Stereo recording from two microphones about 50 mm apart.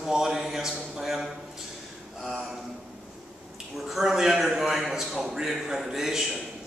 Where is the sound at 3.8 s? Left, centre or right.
Centre.